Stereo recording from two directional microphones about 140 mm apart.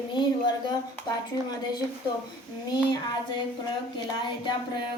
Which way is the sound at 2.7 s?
35° left (ahead or behind).